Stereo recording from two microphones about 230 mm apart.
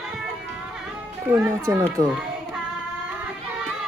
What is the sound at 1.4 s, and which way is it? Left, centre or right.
Speech, centre.